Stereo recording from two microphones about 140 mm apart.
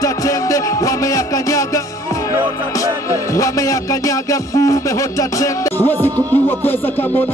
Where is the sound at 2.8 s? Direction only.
25° left (ahead or behind).